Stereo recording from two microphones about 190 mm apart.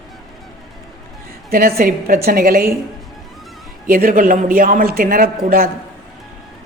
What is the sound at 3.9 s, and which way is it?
A woman's voice, 50° right (ahead or behind).